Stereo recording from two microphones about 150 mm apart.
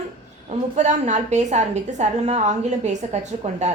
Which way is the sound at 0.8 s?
50° right (ahead or behind).